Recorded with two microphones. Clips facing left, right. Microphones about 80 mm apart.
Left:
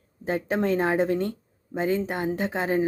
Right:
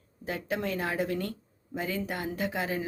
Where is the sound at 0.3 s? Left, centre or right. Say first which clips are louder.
Left 8 dB; left.